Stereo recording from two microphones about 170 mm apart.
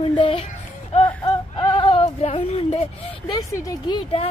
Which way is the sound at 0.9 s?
25° left (ahead or behind).